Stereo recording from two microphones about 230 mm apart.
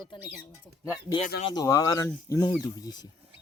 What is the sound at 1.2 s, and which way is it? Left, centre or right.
Speech, left.